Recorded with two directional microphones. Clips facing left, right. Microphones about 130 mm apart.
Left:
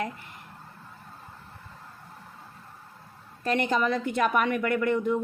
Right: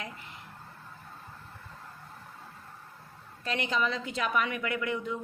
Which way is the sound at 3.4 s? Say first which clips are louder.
Left 5 dB; 50° left (ahead or behind).